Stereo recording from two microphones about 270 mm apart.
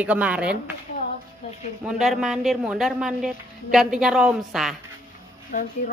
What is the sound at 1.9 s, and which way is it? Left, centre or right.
Speech, centre.